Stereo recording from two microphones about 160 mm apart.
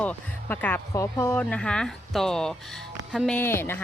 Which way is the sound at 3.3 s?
15° left (ahead or behind).